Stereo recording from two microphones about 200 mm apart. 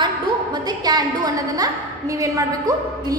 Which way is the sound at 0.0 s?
20° right (ahead or behind).